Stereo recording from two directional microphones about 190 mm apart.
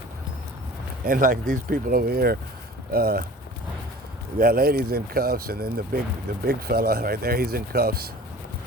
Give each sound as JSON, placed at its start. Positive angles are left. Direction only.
{"t": 1.0, "sound": "speech", "side_deg": -45}
{"t": 4.4, "sound": "speech", "side_deg": -50}